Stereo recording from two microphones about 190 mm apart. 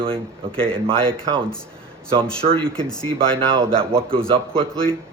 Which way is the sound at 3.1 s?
25° right (ahead or behind).